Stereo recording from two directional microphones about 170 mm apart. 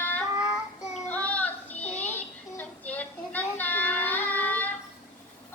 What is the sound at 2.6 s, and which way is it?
Child singing, 10° left (ahead or behind).